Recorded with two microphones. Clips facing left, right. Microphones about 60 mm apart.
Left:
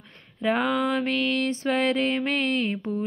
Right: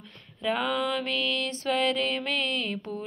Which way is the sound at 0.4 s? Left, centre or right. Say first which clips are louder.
Left 4 dB; left.